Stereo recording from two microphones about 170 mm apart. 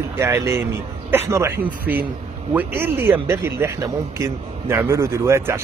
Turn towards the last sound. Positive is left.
turn(degrees=-15)  # may be behind; listen again after turning